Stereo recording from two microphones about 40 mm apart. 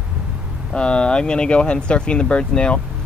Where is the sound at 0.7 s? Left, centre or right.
Left.